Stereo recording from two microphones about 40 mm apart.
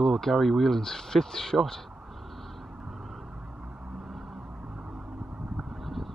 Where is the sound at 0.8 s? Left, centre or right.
Centre.